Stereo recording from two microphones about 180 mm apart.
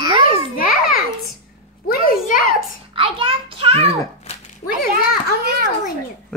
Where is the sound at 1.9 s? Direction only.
55° left (ahead or behind).